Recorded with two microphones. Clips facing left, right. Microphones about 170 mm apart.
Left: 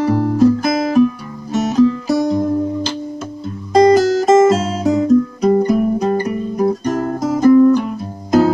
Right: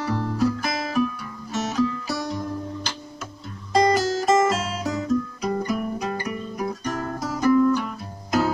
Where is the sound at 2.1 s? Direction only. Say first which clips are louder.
Left 13 dB; 45° left (ahead or behind).